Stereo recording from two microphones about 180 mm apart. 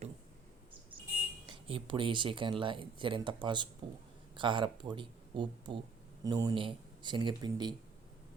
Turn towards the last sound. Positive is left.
turn(degrees=-25)  # may be behind; listen again after turning